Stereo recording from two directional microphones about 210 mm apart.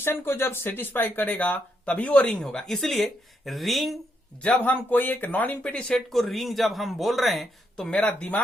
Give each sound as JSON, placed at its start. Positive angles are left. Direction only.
{"t": 0.0, "sound": "speech", "side_deg": 10}